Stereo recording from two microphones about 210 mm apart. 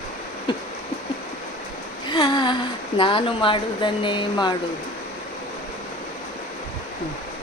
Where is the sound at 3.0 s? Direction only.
25° left (ahead or behind).